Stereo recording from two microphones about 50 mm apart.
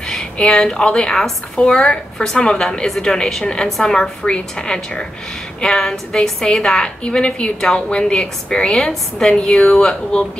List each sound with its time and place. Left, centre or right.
0.0 s a woman's voice: centre